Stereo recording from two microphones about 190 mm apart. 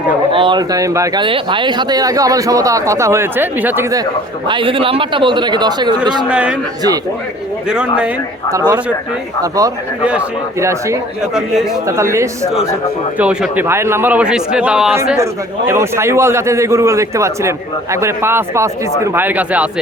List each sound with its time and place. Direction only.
0.3 s speech: 25° right (ahead or behind)
4.4 s a man's voice: 25° right (ahead or behind)
6.2 s a man's voice: 5° right (ahead or behind)
7.7 s a man's voice: 5° right (ahead or behind)
8.5 s a man's voice: 20° right (ahead or behind)
10.0 s speech: 5° right (ahead or behind)
15.2 s speech: 15° right (ahead or behind)